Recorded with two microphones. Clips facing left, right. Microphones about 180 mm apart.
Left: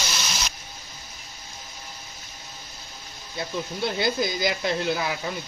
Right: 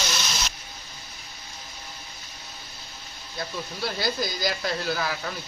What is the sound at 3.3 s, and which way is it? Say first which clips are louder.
A man's voice: left 3 dB; 20° left (ahead or behind).